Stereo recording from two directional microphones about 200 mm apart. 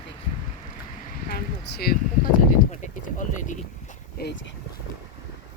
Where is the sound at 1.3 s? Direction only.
50° left (ahead or behind).